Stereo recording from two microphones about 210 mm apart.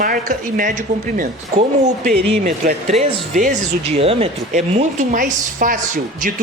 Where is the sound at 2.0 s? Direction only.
40° right (ahead or behind).